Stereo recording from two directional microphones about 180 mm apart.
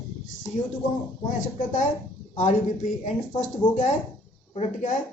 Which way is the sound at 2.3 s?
45° left (ahead or behind).